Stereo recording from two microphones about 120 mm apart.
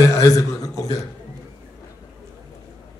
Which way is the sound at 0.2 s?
30° left (ahead or behind).